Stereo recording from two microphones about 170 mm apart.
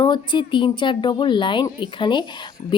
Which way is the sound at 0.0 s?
25° left (ahead or behind).